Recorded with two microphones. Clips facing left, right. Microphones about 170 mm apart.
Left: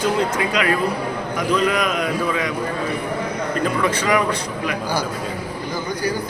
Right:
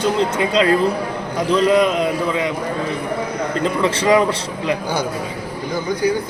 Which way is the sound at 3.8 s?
25° right (ahead or behind).